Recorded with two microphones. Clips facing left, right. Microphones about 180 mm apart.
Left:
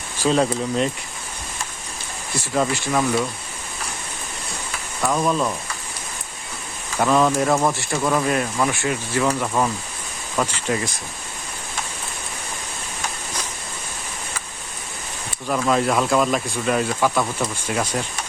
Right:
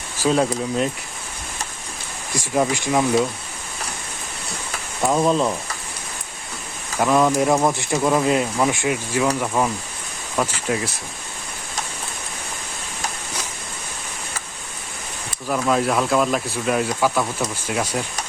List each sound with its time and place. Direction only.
0.2 s speech: 5° right (ahead or behind)
2.3 s speech: 15° right (ahead or behind)
4.9 s speech: 25° right (ahead or behind)
7.0 s speech: 10° right (ahead or behind)
15.4 s speech: 5° right (ahead or behind)